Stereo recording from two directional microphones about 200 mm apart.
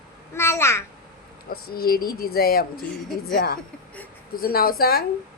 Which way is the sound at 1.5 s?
50° left (ahead or behind).